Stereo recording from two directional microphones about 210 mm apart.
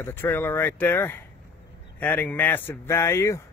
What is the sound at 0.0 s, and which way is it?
Speech, 10° left (ahead or behind).